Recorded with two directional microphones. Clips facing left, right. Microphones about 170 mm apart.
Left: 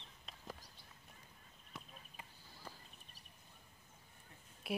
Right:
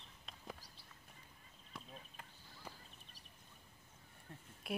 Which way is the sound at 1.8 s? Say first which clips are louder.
Right 1 dB; centre (ahead or behind).